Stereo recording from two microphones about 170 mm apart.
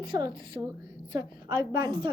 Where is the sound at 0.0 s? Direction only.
25° right (ahead or behind).